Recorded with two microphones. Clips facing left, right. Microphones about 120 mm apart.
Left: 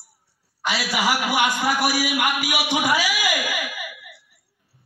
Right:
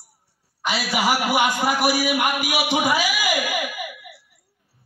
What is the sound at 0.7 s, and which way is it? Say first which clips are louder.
A man's voice: right 1 dB; 30° right (ahead or behind).